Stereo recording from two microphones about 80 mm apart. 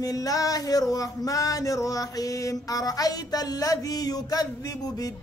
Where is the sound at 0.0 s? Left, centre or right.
Left.